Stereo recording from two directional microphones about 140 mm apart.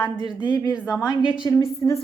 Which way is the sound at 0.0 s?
35° left (ahead or behind).